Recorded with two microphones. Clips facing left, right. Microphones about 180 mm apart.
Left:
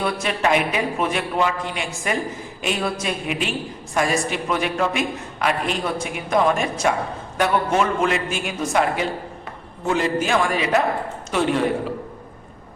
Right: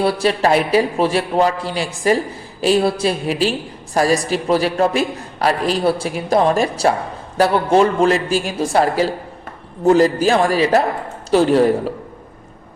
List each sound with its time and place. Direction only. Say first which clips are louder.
0.0 s a man's voice: right 6 dB; 35° right (ahead or behind)